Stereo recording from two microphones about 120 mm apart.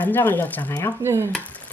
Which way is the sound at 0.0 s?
15° left (ahead or behind).